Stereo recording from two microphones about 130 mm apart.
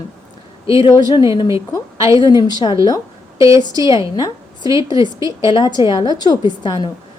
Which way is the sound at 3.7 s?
25° right (ahead or behind).